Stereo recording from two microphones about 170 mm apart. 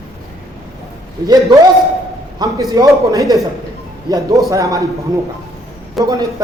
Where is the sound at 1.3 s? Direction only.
25° right (ahead or behind).